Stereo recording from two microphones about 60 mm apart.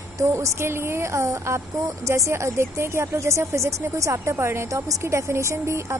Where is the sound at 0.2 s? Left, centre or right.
Right.